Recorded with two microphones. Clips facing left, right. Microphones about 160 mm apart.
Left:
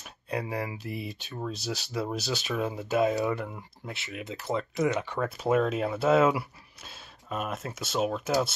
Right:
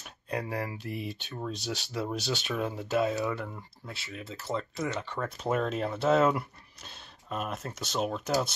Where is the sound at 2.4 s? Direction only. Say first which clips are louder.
Left 2 dB; 5° left (ahead or behind).